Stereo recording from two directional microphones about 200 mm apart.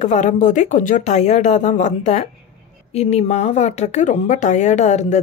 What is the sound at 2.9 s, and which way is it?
Speech, 30° left (ahead or behind).